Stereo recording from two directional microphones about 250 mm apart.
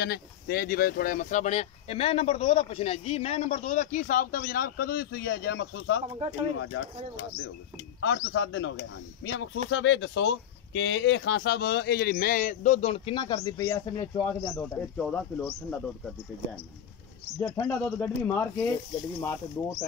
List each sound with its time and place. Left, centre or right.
0.0 s speech: left
6.0 s speech: right
6.5 s speech: left
8.0 s speech: left; by 15.8 s centre
17.4 s speech: centre